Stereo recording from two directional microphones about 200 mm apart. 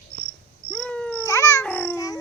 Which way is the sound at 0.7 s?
5° left (ahead or behind).